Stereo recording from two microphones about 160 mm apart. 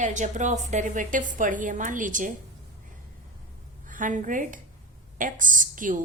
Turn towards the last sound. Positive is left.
turn(degrees=-55)  # may be behind; listen again after turning